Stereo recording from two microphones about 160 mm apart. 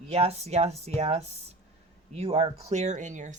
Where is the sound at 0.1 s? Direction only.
40° right (ahead or behind).